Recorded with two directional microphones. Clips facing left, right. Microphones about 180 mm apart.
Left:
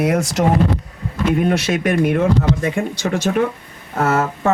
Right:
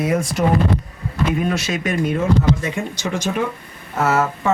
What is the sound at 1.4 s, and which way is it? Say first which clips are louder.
Speech: left 4 dB; 60° left (ahead or behind).